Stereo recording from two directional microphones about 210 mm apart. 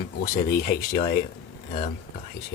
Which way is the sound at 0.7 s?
45° left (ahead or behind).